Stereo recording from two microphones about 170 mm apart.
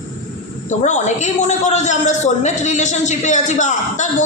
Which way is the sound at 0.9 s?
45° left (ahead or behind).